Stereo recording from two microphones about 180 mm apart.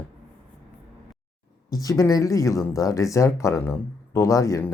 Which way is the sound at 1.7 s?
20° left (ahead or behind).